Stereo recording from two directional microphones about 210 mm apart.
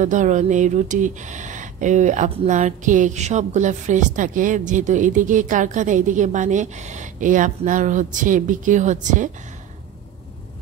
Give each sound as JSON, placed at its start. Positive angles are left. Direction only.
{"t": 0.0, "sound": "speech", "side_deg": -35}